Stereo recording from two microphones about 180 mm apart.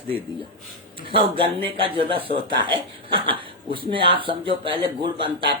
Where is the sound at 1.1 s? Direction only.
30° right (ahead or behind).